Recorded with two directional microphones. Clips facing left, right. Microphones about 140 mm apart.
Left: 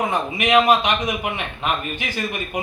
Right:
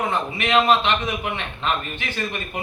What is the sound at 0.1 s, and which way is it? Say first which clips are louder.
A man's voice: left 3 dB; 15° left (ahead or behind).